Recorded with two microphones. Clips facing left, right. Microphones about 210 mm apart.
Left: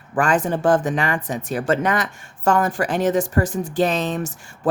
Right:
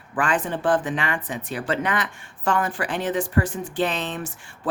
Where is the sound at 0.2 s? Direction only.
40° left (ahead or behind).